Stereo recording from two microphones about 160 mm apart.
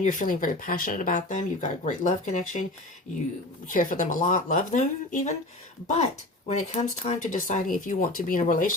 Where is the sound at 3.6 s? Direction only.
55° left (ahead or behind).